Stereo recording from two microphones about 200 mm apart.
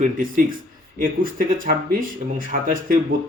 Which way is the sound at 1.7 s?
45° right (ahead or behind).